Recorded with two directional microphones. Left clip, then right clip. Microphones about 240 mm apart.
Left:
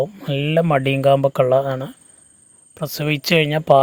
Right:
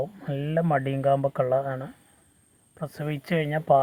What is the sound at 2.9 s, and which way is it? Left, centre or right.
Speech, left.